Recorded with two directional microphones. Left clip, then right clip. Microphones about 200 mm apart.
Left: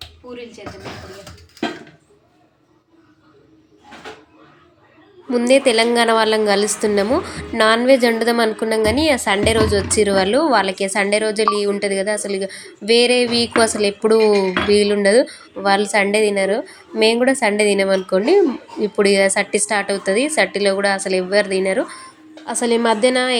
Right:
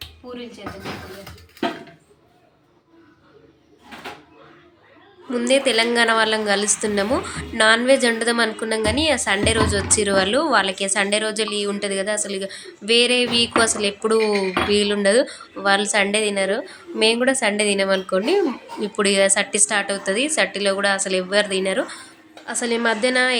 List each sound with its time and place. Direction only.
5.3 s speech: 20° left (ahead or behind)